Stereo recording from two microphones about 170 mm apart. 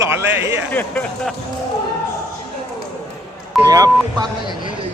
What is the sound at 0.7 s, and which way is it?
Speech, 10° left (ahead or behind).